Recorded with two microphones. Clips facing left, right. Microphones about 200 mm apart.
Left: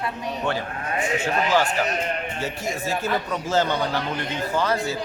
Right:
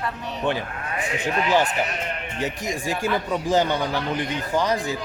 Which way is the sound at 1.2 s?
20° right (ahead or behind).